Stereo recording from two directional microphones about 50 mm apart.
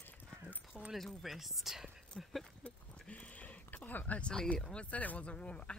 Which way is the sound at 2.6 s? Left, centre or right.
Left.